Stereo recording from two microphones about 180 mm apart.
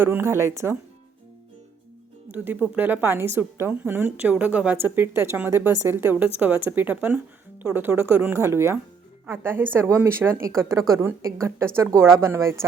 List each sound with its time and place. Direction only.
0.0 s a woman's voice: 10° right (ahead or behind)
2.3 s a woman's voice: 10° right (ahead or behind)